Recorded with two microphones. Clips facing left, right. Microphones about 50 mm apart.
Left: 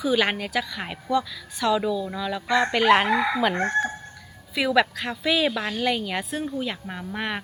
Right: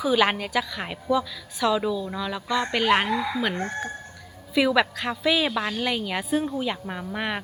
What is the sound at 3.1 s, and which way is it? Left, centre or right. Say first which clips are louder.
Chicken: left 3 dB; left.